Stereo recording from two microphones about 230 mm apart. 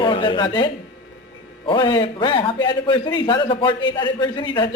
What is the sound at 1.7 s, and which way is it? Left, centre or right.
Speech, centre.